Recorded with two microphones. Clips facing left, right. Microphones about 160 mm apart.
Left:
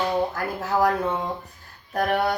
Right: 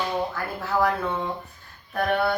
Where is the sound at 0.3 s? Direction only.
40° left (ahead or behind).